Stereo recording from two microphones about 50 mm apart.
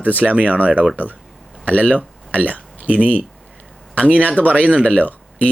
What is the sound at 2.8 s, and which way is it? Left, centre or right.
Speech, right.